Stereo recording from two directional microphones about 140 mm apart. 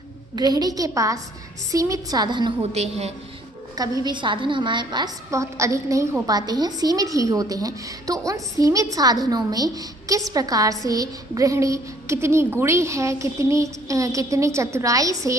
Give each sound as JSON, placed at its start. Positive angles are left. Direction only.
{"t": 0.3, "sound": "a woman's voice", "side_deg": -30}
{"t": 2.6, "sound": "a woman's voice", "side_deg": -50}
{"t": 4.0, "sound": "a woman's voice", "side_deg": -35}